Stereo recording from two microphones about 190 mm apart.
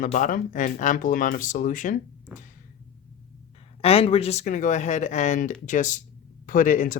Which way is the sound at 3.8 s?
30° left (ahead or behind).